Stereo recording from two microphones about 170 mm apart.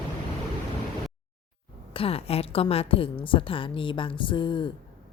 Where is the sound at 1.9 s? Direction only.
35° left (ahead or behind).